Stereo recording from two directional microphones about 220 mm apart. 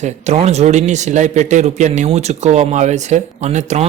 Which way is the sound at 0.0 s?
30° right (ahead or behind).